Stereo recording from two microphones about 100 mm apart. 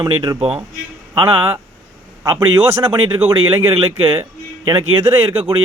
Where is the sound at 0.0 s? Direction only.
50° right (ahead or behind).